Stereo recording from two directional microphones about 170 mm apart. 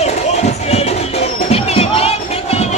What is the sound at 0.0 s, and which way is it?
Music, 40° left (ahead or behind).